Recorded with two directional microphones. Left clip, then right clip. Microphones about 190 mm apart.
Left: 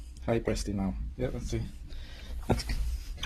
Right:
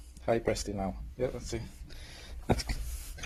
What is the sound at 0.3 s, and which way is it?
Speech, centre (ahead or behind).